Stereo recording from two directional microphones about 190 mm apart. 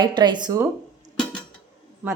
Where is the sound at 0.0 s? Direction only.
25° right (ahead or behind).